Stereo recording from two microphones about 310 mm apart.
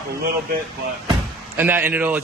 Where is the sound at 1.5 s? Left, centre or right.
Centre.